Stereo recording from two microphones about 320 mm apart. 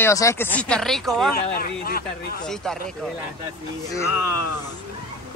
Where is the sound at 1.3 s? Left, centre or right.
Left.